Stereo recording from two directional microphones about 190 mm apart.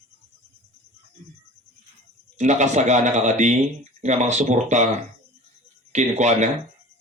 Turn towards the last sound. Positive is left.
turn(degrees=-40)  # may be behind; listen again after turning